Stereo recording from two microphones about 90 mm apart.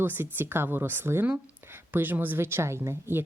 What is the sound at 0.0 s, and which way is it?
A woman's voice, 20° right (ahead or behind).